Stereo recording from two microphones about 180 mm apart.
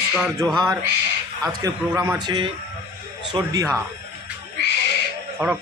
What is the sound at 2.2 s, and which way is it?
Speech, 25° right (ahead or behind).